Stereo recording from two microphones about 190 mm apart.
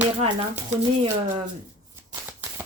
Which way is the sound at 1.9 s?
15° right (ahead or behind).